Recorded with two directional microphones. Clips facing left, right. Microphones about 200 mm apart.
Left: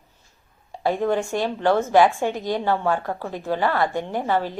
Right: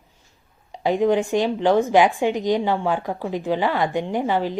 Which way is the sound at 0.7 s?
15° right (ahead or behind).